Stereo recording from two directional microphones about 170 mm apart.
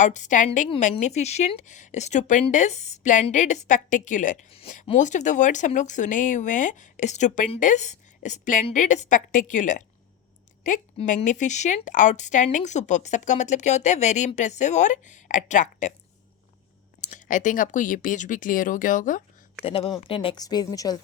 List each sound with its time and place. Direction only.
0.0 s speech: 45° left (ahead or behind)
17.0 s speech: 45° left (ahead or behind)
19.6 s a woman's voice: 35° left (ahead or behind)